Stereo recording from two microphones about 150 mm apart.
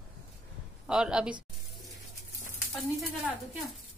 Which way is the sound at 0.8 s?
5° right (ahead or behind).